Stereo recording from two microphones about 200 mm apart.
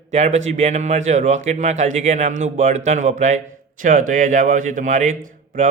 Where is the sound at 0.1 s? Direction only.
35° right (ahead or behind).